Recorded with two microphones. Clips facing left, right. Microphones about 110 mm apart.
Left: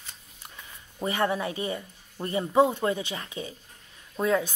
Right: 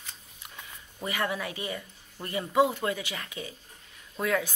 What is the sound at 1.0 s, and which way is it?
Speech, 30° left (ahead or behind).